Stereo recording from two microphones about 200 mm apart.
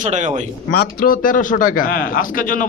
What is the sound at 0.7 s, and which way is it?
A man's voice, 50° left (ahead or behind).